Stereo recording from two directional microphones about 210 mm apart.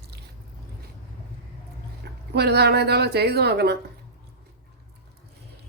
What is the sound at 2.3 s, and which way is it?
A woman's voice, 50° right (ahead or behind).